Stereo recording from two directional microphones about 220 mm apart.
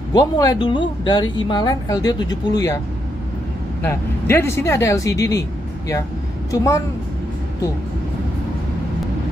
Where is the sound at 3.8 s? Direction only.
10° left (ahead or behind).